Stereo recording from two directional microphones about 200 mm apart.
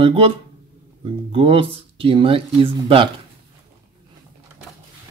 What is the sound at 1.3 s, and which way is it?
Speech, 25° right (ahead or behind).